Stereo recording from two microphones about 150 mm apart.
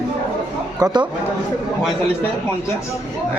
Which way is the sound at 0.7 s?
25° right (ahead or behind).